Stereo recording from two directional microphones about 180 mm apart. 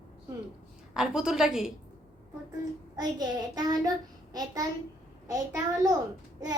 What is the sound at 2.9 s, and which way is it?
A child's voice, 25° right (ahead or behind).